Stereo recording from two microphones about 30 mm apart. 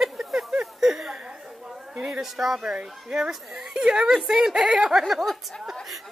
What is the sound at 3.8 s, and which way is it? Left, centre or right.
Speech, right.